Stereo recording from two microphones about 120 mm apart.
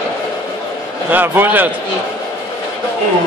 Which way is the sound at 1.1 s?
15° right (ahead or behind).